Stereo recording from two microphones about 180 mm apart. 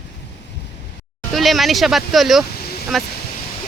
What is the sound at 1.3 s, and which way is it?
Speech, centre (ahead or behind).